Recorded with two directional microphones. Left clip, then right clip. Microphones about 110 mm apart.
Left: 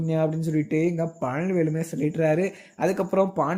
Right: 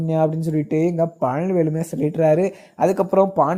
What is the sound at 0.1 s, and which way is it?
Speech, 40° right (ahead or behind).